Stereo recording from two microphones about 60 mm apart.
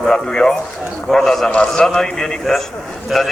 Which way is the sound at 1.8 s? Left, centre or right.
Centre.